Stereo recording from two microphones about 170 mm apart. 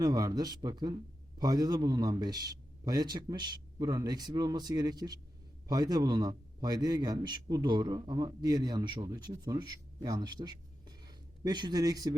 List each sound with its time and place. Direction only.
0.0 s a man's voice: 20° right (ahead or behind)